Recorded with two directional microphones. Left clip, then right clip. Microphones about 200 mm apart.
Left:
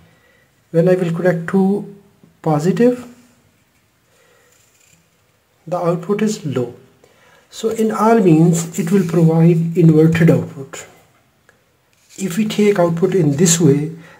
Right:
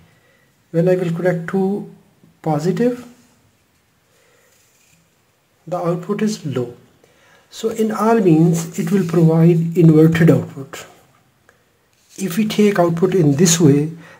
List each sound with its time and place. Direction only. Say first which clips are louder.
0.7 s speech: left 2 dB; 10° left (ahead or behind)
2.4 s speech: left 3 dB; 15° left (ahead or behind)
5.7 s speech: left 3 dB; 5° left (ahead or behind)
9.4 s speech: even; 20° right (ahead or behind)
12.2 s speech: right 1 dB; 15° right (ahead or behind)